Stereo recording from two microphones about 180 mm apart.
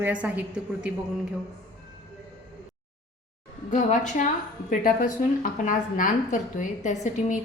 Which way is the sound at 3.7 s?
45° left (ahead or behind).